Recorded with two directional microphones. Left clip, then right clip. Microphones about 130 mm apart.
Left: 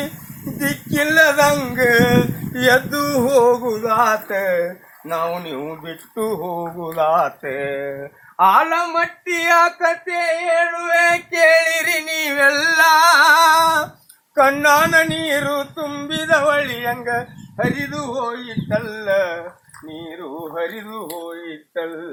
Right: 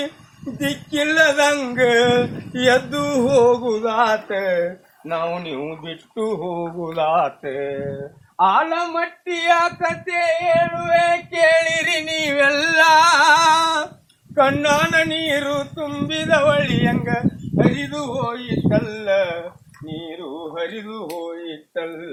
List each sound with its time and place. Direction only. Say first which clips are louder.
0.6 s speech: left 2 dB; centre (ahead or behind)
7.4 s mantra: left 1 dB; 50° left (ahead or behind)
8.4 s speech: left 3 dB; 90° left; by 9.4 s 65° left (ahead or behind)
9.4 s female singing: left 3 dB; 25° left (ahead or behind)
10.8 s female singing: left 1 dB; 35° left (ahead or behind)
11.4 s singing: left 2 dB; 15° left (ahead or behind)
14.3 s speech: left 3 dB; 10° left (ahead or behind)
20.7 s speech: left 1 dB; 25° right (ahead or behind)